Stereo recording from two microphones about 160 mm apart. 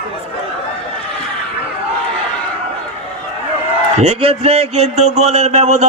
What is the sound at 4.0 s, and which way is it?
Speech, 40° right (ahead or behind).